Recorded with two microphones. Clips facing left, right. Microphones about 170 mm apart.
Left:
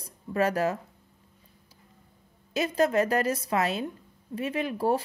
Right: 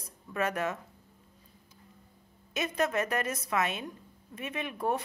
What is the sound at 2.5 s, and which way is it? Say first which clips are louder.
Speech: left 6 dB; 30° left (ahead or behind).